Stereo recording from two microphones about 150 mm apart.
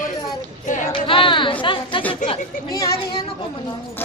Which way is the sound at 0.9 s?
35° left (ahead or behind).